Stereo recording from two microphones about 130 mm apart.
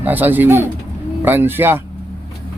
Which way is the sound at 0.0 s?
15° right (ahead or behind).